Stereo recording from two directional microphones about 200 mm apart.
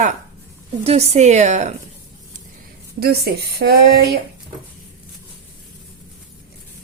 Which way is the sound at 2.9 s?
55° right (ahead or behind).